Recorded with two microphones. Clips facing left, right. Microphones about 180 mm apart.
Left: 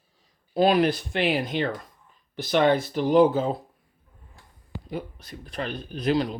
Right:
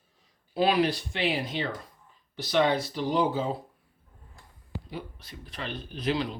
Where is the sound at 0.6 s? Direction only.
45° left (ahead or behind).